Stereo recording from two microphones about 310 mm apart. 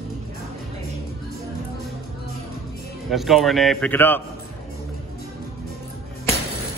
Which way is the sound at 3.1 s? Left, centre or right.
Centre.